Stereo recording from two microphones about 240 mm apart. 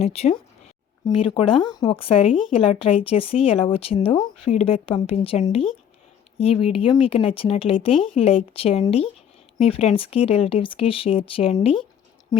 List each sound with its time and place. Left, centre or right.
0.0 s speech: left